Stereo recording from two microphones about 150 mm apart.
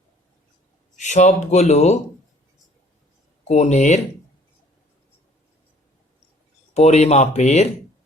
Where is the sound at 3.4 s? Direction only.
50° left (ahead or behind).